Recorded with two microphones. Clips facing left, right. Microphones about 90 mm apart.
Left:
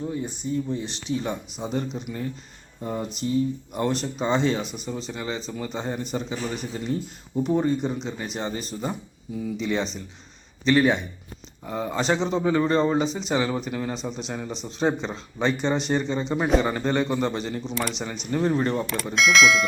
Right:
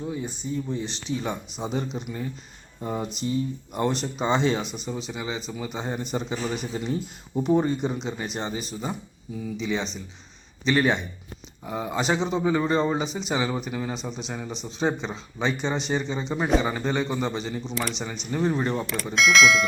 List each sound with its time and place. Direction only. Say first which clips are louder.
0.0 s speech: left 2 dB; 10° right (ahead or behind)
1.5 s speech: left 1 dB; 5° right (ahead or behind)
11.6 s speech: left 1 dB; 5° right (ahead or behind)